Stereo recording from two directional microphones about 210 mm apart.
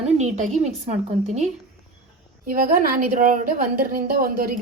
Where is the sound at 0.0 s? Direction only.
30° right (ahead or behind).